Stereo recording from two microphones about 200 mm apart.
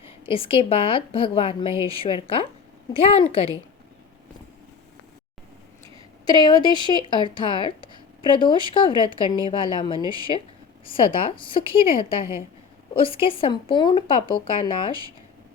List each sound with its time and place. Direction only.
0.3 s speech: 25° left (ahead or behind)
6.2 s speech: 20° left (ahead or behind)